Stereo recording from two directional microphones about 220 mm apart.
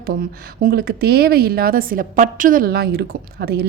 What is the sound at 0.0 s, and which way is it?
A woman's voice, 40° right (ahead or behind).